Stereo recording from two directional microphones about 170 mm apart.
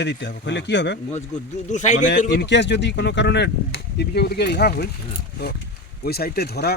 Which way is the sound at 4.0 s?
75° left (ahead or behind).